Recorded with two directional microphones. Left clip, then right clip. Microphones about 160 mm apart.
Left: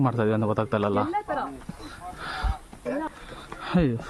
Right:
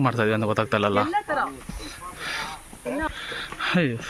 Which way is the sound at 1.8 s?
35° left (ahead or behind).